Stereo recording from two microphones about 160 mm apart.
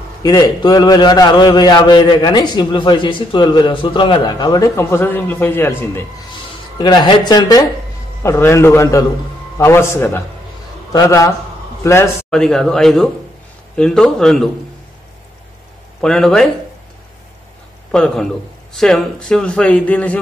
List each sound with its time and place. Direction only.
0.2 s a man's voice: 25° left (ahead or behind)
6.8 s a man's voice: 30° left (ahead or behind)
12.3 s a man's voice: 5° left (ahead or behind)
16.0 s a man's voice: 5° left (ahead or behind)
17.9 s a man's voice: 5° left (ahead or behind)